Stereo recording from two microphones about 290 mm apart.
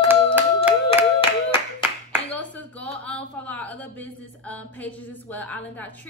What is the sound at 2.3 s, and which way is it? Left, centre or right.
A woman's voice, centre.